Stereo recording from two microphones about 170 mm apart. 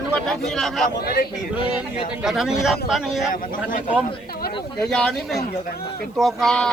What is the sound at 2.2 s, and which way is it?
Speech, 5° right (ahead or behind).